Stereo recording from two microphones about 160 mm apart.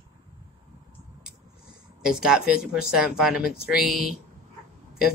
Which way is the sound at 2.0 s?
5° right (ahead or behind).